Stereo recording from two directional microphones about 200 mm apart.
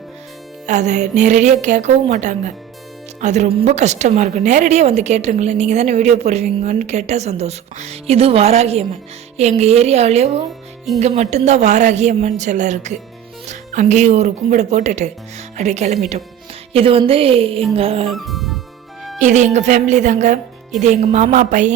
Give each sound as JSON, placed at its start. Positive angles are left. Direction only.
{"t": 0.7, "sound": "a woman's voice", "side_deg": -35}
{"t": 18.1, "sound": "music", "side_deg": 0}
{"t": 19.2, "sound": "speech", "side_deg": -35}